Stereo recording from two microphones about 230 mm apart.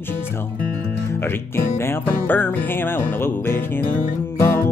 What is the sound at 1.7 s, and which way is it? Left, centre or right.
Speech, centre.